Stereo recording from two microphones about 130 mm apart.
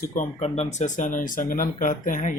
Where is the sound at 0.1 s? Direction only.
90° left.